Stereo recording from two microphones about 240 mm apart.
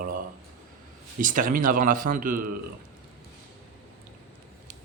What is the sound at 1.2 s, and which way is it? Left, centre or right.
Speech, right.